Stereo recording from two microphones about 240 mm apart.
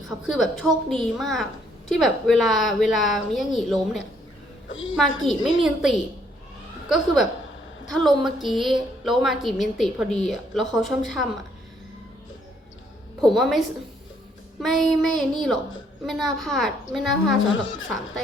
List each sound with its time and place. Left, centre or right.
0.3 s a woman's voice: centre
4.7 s speech: left
4.9 s a woman's voice: centre
13.3 s a woman's voice: centre
14.6 s a woman's voice: centre
17.5 s speech: left